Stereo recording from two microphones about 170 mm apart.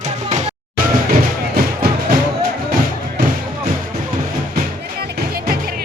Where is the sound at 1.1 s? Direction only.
60° right (ahead or behind).